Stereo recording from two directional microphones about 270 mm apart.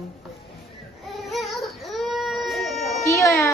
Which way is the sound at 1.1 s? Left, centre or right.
Centre.